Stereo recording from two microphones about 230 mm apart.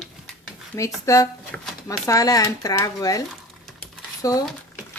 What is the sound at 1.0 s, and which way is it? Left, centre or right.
Speech, centre.